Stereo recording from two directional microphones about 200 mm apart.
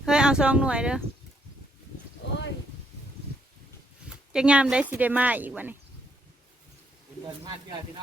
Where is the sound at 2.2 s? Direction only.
65° left (ahead or behind).